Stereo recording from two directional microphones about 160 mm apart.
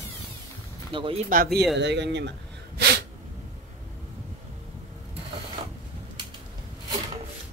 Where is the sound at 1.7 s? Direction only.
90° right.